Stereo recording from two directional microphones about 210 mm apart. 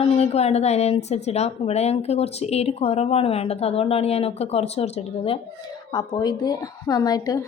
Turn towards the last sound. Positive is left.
turn(degrees=20)  # may be behind; listen again after turning